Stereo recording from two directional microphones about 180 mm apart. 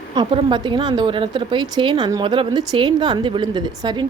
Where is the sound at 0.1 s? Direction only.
30° right (ahead or behind).